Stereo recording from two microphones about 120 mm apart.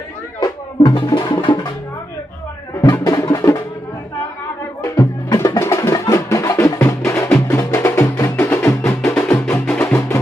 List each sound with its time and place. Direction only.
0.3 s speech: 30° left (ahead or behind)
2.8 s music: 30° left (ahead or behind)
4.8 s music: 25° left (ahead or behind)
9.1 s music: 10° left (ahead or behind)